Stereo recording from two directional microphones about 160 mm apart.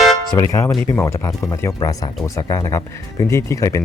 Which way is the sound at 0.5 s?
20° left (ahead or behind).